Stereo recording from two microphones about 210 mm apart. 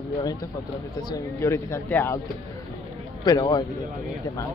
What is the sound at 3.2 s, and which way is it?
Speech, 20° left (ahead or behind).